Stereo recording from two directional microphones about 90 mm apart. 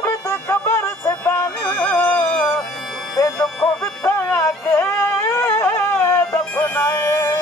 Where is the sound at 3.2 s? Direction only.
30° left (ahead or behind).